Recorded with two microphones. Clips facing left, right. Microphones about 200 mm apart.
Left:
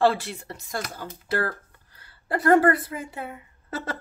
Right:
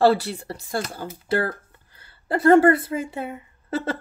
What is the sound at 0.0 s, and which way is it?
A woman's voice, 35° right (ahead or behind).